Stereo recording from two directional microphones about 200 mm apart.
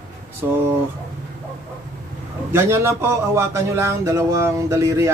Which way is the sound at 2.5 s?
15° right (ahead or behind).